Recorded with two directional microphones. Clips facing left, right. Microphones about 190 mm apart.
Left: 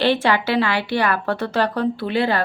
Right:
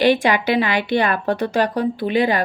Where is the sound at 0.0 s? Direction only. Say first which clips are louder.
Right 2 dB; 15° right (ahead or behind).